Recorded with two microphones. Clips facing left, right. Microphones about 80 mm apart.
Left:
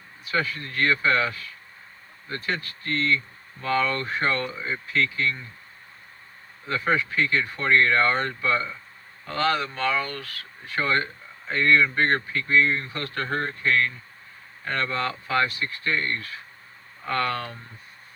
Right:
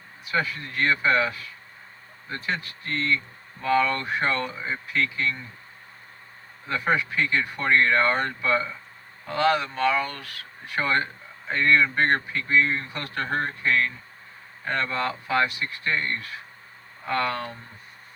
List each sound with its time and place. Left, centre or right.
0.3 s speech: centre
6.7 s speech: centre